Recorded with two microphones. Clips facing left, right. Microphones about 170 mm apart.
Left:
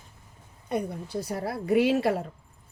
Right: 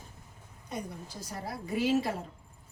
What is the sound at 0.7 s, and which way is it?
Speech, 60° left (ahead or behind).